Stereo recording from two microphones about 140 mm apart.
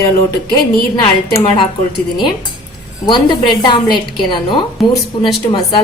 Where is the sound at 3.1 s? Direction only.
35° left (ahead or behind).